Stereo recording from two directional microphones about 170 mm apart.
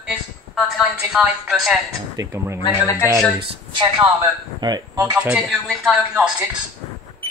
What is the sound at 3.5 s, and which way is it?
A woman's voice, 30° right (ahead or behind).